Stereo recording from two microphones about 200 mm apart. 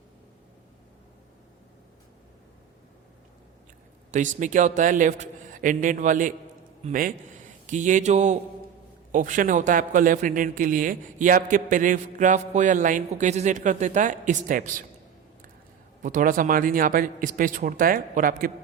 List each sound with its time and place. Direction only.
4.1 s a man's voice: 40° right (ahead or behind)
16.0 s speech: 40° right (ahead or behind)